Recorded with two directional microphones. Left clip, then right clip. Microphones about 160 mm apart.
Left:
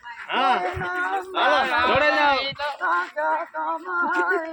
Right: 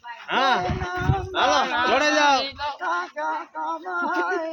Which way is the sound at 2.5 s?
90° left.